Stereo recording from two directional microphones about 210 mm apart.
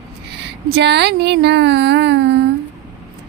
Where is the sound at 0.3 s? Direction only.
55° right (ahead or behind).